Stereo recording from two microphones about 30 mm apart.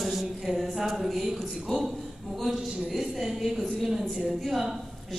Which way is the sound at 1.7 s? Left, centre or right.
Left.